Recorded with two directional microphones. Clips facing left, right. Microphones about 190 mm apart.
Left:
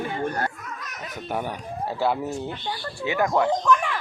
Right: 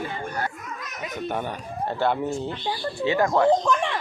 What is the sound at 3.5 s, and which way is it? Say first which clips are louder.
Speech: right 2 dB; 25° right (ahead or behind).